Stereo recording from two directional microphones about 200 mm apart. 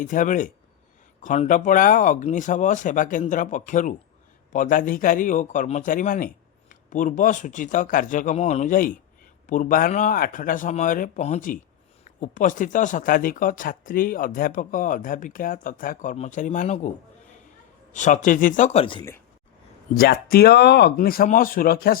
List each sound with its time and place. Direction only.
0.0 s speech: 40° left (ahead or behind)
17.9 s speech: 40° left (ahead or behind)
19.9 s speech: 50° left (ahead or behind)